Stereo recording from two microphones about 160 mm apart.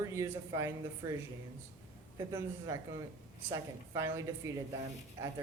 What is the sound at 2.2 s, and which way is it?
A woman's voice, 15° right (ahead or behind).